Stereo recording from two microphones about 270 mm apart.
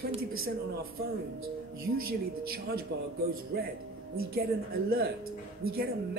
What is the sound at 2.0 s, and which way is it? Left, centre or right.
Speech, right.